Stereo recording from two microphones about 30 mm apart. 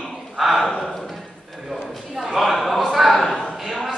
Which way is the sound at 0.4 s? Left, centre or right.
Centre.